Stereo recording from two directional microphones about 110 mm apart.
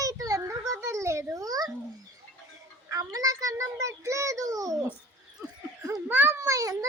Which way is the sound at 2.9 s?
30° right (ahead or behind).